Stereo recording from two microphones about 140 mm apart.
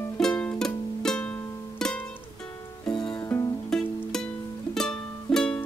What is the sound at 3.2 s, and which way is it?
Music, 20° left (ahead or behind).